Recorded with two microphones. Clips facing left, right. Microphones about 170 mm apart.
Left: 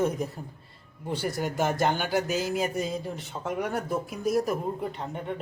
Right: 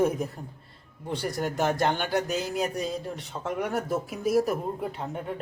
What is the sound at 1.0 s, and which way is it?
Speech, 5° left (ahead or behind).